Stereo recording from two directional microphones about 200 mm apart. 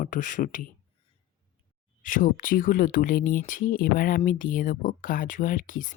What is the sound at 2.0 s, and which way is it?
Speech, 40° left (ahead or behind).